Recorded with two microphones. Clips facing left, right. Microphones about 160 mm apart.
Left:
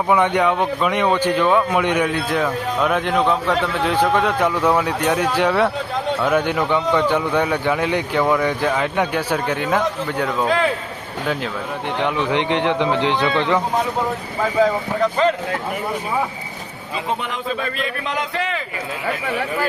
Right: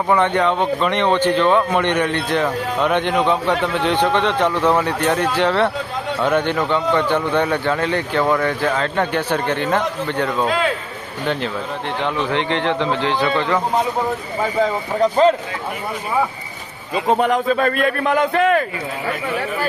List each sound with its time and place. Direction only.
0.1 s a man's voice: 10° left (ahead or behind)
12.0 s a man's voice: 15° left (ahead or behind)
17.1 s a man's voice: 45° right (ahead or behind)